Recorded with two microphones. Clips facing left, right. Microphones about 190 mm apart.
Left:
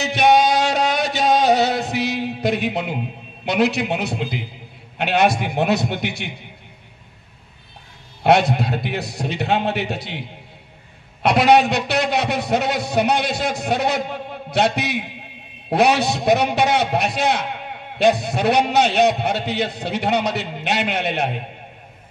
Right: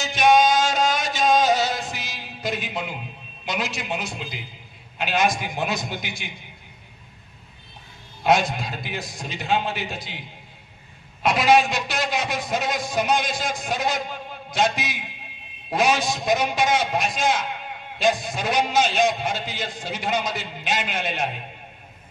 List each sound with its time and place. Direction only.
0.0 s music: 65° left (ahead or behind)
3.4 s a man's voice: 65° left (ahead or behind)
8.2 s a man's voice: 65° left (ahead or behind)
11.2 s a man's voice: 65° left (ahead or behind)